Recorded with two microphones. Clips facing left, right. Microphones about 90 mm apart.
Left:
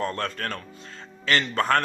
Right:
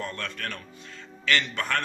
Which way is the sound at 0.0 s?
40° left (ahead or behind).